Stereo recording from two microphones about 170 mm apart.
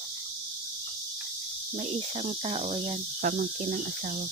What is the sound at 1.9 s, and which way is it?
Speech, 40° right (ahead or behind).